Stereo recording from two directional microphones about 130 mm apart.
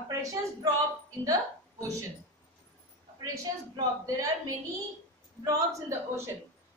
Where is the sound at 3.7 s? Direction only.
25° right (ahead or behind).